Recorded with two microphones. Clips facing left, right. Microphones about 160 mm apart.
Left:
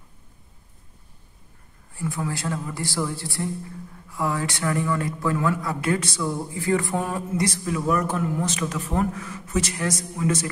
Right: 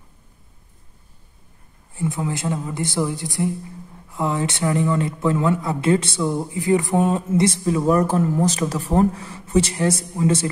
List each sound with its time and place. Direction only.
2.0 s speech: 20° right (ahead or behind)